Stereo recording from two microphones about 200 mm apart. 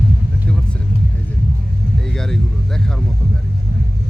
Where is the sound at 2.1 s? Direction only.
5° left (ahead or behind).